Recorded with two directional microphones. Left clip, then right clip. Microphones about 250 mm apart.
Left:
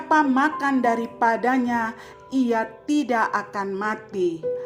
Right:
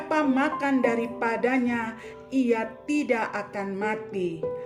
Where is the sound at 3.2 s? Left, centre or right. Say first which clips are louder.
Left 7 dB; centre.